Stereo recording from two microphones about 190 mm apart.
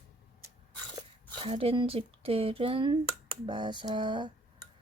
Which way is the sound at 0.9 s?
25° right (ahead or behind).